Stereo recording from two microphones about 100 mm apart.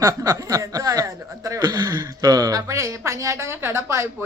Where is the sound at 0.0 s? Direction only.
35° right (ahead or behind).